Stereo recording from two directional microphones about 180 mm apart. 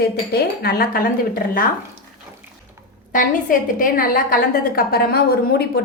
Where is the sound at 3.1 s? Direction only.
50° left (ahead or behind).